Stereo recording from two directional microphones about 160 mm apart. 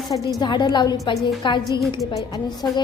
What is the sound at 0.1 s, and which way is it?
Speech, 25° left (ahead or behind).